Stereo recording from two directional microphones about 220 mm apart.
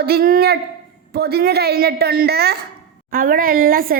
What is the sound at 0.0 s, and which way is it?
A woman's voice, 45° right (ahead or behind).